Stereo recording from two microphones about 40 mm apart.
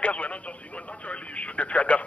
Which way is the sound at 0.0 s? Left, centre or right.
Left.